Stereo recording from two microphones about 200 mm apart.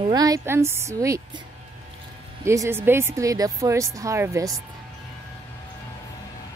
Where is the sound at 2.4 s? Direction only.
15° right (ahead or behind).